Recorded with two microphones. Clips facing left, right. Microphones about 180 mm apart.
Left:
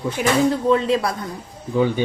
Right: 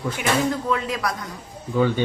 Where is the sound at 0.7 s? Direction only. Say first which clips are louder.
Left 7 dB; 30° left (ahead or behind).